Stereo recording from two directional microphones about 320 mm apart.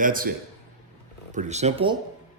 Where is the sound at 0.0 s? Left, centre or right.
Right.